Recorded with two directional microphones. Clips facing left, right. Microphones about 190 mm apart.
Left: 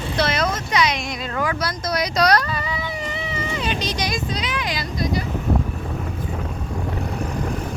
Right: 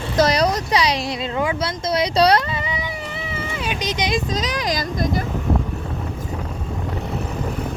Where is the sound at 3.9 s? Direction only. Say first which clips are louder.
Right 3 dB; 20° right (ahead or behind).